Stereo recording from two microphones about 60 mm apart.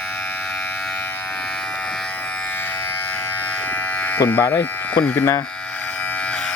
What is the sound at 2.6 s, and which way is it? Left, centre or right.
Electric shaver, left.